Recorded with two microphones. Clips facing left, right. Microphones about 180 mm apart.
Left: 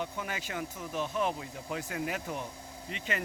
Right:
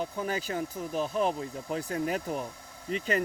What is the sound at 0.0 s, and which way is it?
Speech, 35° right (ahead or behind).